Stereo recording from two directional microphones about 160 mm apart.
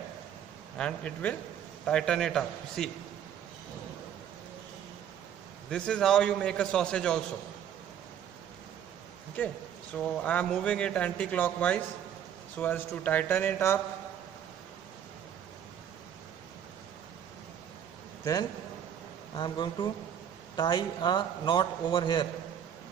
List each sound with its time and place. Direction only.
0.7 s a man's voice: 5° left (ahead or behind)
5.7 s a man's voice: 5° left (ahead or behind)
9.9 s a man's voice: 5° left (ahead or behind)
19.3 s a man's voice: 30° left (ahead or behind)